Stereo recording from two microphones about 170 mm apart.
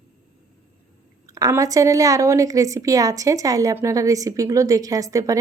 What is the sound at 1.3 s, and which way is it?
A woman's voice, 20° right (ahead or behind).